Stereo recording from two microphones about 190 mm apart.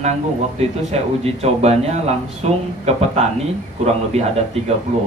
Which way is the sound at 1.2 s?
35° right (ahead or behind).